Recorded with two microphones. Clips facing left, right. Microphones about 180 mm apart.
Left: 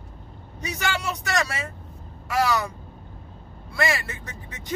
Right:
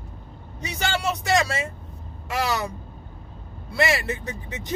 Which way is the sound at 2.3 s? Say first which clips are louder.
Left 2 dB; 25° right (ahead or behind).